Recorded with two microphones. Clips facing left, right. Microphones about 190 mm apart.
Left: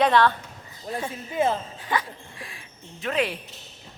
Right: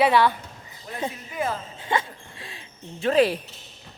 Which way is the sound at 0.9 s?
25° left (ahead or behind).